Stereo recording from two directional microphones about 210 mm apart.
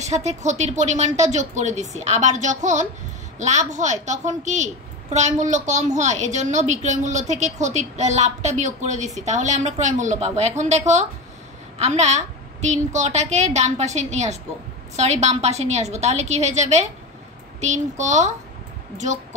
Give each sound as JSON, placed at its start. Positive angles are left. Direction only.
{"t": 0.0, "sound": "a woman's voice", "side_deg": -30}
{"t": 11.8, "sound": "a woman's voice", "side_deg": -30}